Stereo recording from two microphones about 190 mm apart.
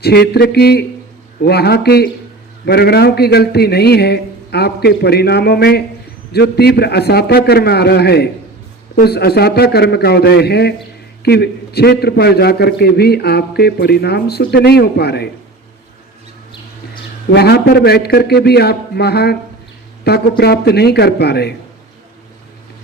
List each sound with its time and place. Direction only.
0.0 s a man's voice: 55° left (ahead or behind)
17.2 s a man's voice: 60° left (ahead or behind)